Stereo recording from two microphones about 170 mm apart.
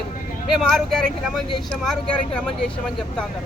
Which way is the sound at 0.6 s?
Centre (ahead or behind).